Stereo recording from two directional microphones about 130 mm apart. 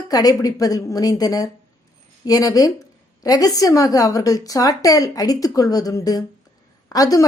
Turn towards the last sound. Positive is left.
turn(degrees=30)  # may be behind; listen again after turning